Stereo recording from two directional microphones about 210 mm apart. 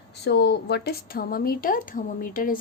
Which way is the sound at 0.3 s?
55° left (ahead or behind).